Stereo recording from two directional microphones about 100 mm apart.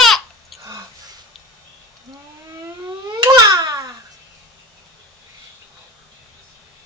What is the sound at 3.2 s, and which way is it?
Baby cry, 40° right (ahead or behind).